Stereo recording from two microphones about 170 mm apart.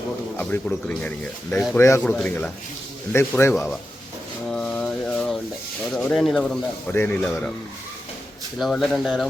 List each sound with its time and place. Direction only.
0.3 s speech: 10° left (ahead or behind)
1.8 s speech: 15° left (ahead or behind)
4.4 s mantra: 5° left (ahead or behind)
5.9 s speech: 5° left (ahead or behind)
8.5 s speech: centre (ahead or behind)